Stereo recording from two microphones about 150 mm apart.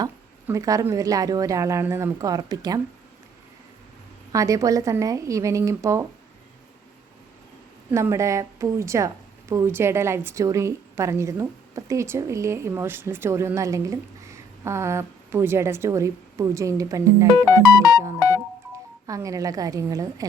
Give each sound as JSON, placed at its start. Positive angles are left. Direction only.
{"t": 0.4, "sound": "a woman's voice", "side_deg": -20}
{"t": 4.3, "sound": "a woman's voice", "side_deg": -20}
{"t": 7.9, "sound": "a woman's voice", "side_deg": -15}
{"t": 19.0, "sound": "a woman's voice", "side_deg": -20}